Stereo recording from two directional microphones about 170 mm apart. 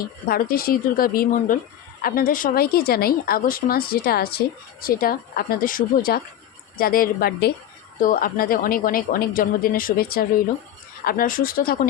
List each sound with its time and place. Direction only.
0.3 s a woman's voice: 60° left (ahead or behind)
8.0 s a woman's voice: 55° left (ahead or behind)